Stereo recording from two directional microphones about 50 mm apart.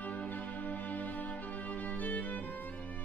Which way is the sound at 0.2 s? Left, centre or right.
Left.